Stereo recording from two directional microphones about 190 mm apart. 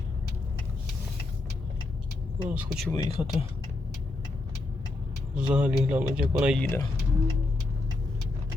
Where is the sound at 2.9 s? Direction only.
15° left (ahead or behind).